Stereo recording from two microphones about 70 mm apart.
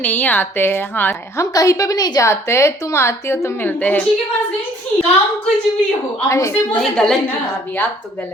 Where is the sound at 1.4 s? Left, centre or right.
Left.